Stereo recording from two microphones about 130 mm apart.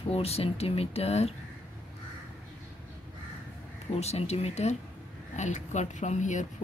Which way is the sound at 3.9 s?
55° left (ahead or behind).